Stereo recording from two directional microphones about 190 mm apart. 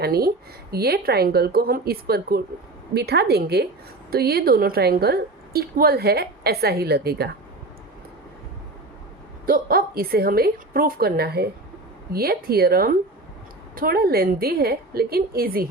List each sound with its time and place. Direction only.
0.0 s a woman's voice: 55° right (ahead or behind)
9.5 s a woman's voice: 50° right (ahead or behind)